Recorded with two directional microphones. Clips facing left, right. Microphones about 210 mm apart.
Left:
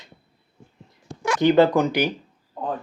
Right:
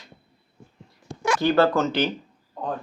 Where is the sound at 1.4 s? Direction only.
20° left (ahead or behind).